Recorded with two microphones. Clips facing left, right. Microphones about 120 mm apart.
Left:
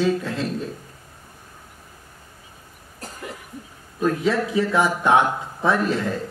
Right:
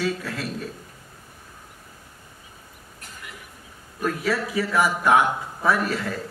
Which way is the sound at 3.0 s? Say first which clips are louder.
Left 8 dB; 35° left (ahead or behind).